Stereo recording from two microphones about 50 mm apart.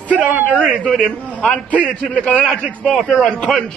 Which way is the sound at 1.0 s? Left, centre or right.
Left.